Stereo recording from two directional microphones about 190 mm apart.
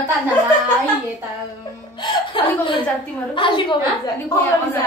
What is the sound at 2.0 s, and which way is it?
A woman's voice, 25° left (ahead or behind).